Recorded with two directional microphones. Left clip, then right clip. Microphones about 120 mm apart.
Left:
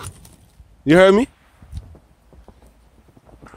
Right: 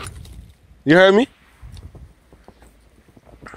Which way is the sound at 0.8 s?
25° left (ahead or behind).